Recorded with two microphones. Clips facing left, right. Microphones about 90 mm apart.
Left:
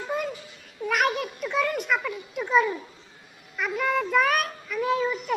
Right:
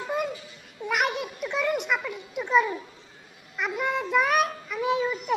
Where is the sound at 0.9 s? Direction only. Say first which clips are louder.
Left 2 dB; 15° right (ahead or behind).